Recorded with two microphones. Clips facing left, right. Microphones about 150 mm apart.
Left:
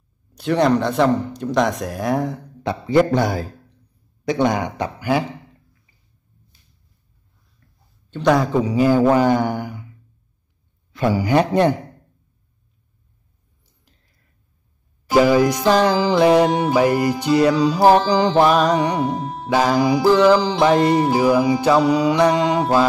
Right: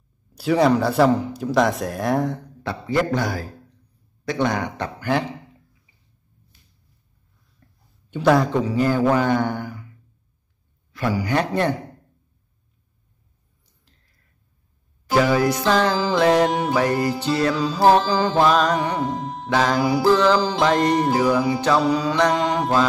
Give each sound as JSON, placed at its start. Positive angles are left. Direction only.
{"t": 0.3, "sound": "speech", "side_deg": -5}
{"t": 2.6, "sound": "a man's voice", "side_deg": 20}
{"t": 4.2, "sound": "music", "side_deg": 15}
{"t": 7.6, "sound": "a sound", "side_deg": -35}
{"t": 8.1, "sound": "speech", "side_deg": -5}
{"t": 8.6, "sound": "music", "side_deg": 15}
{"t": 9.1, "sound": "mantra", "side_deg": 10}
{"t": 10.9, "sound": "a man's voice", "side_deg": 25}
{"t": 11.2, "sound": "music", "side_deg": 15}
{"t": 15.0, "sound": "music", "side_deg": 15}